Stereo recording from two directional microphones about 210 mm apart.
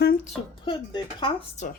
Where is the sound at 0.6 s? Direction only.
25° left (ahead or behind).